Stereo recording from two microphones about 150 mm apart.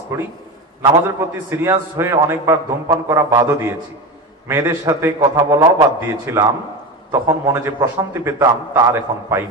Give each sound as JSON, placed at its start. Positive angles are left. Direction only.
{"t": 0.1, "sound": "a man's voice", "side_deg": -15}